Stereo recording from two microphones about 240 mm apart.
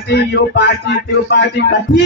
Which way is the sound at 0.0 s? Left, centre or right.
Left.